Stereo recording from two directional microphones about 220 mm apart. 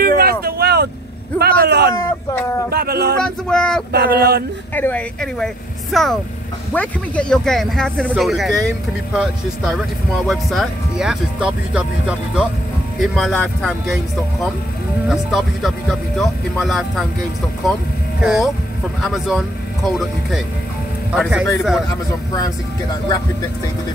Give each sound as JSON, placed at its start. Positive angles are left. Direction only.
{"t": 0.0, "sound": "vehicle", "side_deg": -45}
{"t": 1.4, "sound": "a sound", "side_deg": -45}
{"t": 3.3, "sound": "speech", "side_deg": 5}
{"t": 3.9, "sound": "a sound", "side_deg": -45}
{"t": 4.7, "sound": "speech", "side_deg": 5}
{"t": 15.0, "sound": "speech", "side_deg": 0}
{"t": 18.2, "sound": "speech", "side_deg": -5}